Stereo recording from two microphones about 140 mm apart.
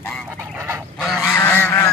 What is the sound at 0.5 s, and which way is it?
Duck, 15° right (ahead or behind).